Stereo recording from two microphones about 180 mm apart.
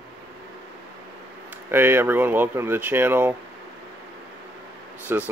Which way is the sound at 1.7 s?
10° right (ahead or behind).